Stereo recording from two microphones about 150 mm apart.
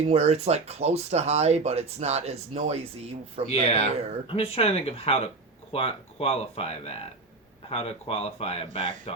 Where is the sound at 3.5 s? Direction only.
45° left (ahead or behind).